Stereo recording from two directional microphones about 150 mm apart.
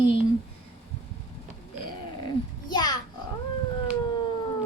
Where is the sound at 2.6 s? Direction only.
30° left (ahead or behind).